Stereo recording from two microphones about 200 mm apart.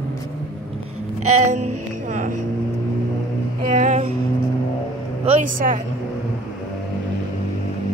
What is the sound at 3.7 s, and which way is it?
Speech, 35° right (ahead or behind).